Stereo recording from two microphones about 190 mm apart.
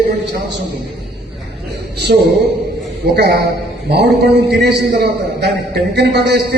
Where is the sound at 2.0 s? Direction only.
60° right (ahead or behind).